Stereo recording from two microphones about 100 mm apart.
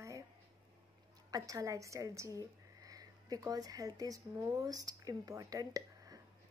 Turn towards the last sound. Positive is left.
turn(degrees=-35)  # may be behind; listen again after turning